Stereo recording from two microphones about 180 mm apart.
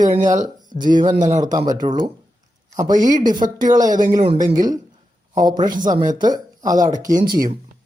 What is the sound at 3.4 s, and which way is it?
Speech, 45° right (ahead or behind).